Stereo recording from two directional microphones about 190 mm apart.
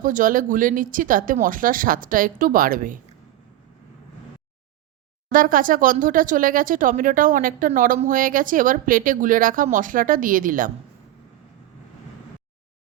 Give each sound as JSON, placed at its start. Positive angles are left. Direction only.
{"t": 0.0, "sound": "speech", "side_deg": -45}
{"t": 5.3, "sound": "speech", "side_deg": -45}